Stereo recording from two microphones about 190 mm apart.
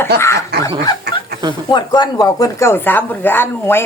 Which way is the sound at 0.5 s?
60° right (ahead or behind).